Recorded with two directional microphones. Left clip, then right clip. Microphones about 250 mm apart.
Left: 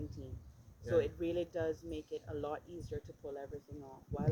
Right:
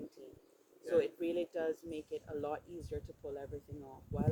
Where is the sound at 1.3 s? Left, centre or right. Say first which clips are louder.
Even; centre.